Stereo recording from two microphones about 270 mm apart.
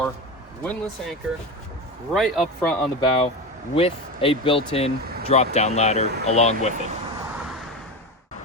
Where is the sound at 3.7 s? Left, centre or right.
Left.